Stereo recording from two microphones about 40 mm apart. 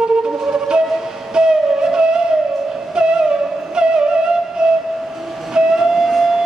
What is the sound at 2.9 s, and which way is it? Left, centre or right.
Music, right.